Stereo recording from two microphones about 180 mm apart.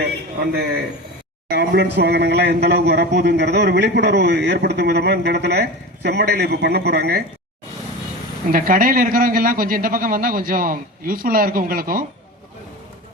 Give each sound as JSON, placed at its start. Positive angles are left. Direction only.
{"t": 1.5, "sound": "speech", "side_deg": -70}
{"t": 8.5, "sound": "a man's voice", "side_deg": -50}